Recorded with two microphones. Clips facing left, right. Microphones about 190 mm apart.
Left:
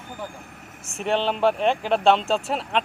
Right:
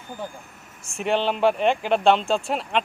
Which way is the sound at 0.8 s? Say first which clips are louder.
Right 1 dB; centre (ahead or behind).